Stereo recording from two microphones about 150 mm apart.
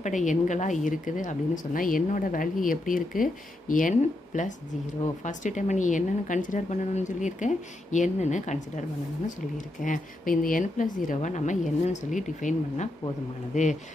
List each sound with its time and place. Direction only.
0.0 s speech: 55° left (ahead or behind)
9.8 s speech: 60° left (ahead or behind)